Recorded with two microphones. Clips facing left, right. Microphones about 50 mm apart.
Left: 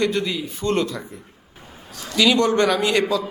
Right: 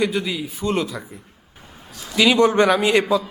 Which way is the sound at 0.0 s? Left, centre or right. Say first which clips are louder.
Even; centre.